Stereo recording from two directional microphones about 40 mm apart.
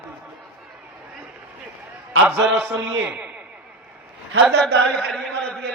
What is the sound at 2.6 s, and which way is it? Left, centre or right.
Speech, right.